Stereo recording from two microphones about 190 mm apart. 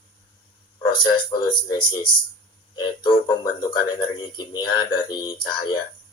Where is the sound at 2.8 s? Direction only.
25° left (ahead or behind).